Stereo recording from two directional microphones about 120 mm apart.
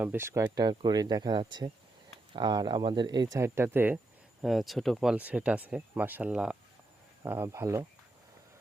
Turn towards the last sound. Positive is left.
turn(degrees=-25)  # may be behind; listen again after turning